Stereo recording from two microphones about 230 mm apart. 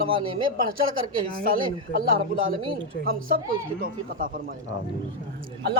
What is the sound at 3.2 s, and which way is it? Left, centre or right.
Speech, right.